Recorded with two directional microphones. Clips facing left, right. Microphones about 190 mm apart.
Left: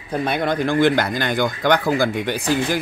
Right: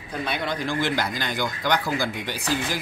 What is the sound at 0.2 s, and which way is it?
Speech, 50° left (ahead or behind).